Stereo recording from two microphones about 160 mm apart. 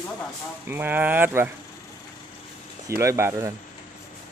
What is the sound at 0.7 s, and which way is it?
Speech, 10° right (ahead or behind).